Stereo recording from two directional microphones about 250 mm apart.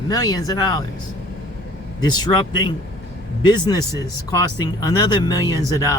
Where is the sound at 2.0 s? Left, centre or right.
Centre.